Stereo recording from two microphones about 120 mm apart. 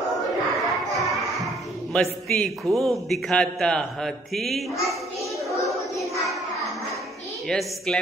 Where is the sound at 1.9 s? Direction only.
5° left (ahead or behind).